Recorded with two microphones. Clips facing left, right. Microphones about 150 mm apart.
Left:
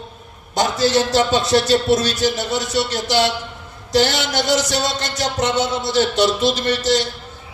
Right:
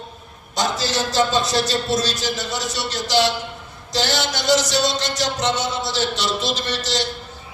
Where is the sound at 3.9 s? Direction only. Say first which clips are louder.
Left 5 dB; 55° left (ahead or behind).